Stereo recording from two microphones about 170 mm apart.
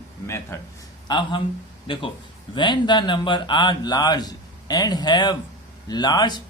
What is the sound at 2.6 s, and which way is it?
Speech, 25° left (ahead or behind).